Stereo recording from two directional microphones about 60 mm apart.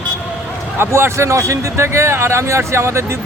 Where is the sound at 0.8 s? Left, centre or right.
Right.